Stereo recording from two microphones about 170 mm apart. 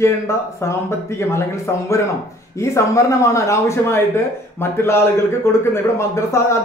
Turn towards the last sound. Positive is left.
turn(degrees=15)  # may be behind; listen again after turning